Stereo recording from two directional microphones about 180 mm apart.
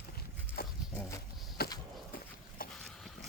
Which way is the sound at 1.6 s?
60° left (ahead or behind).